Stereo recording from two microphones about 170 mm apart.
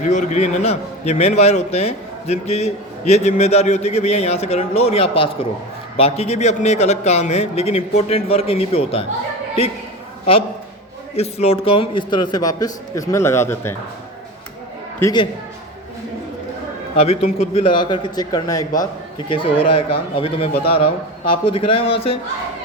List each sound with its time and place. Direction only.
0.0 s a man's voice: 45° left (ahead or behind)
11.2 s a man's voice: 35° left (ahead or behind); by 13.7 s 15° left (ahead or behind)
15.0 s a man's voice: 15° left (ahead or behind)
17.0 s a man's voice: 40° left (ahead or behind); by 18.6 s 20° left (ahead or behind)
19.3 s a man's voice: 35° left (ahead or behind)